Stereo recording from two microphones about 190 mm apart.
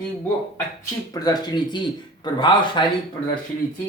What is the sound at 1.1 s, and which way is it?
Speech, 20° left (ahead or behind).